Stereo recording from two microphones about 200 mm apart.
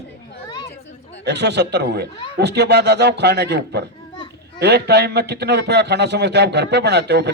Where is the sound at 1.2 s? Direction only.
55° right (ahead or behind).